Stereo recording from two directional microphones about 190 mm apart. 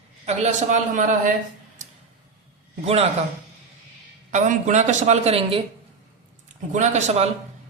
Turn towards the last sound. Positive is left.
turn(degrees=-35)  # may be behind; listen again after turning